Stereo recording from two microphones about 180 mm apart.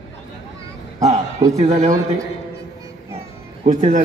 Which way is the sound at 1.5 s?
40° right (ahead or behind).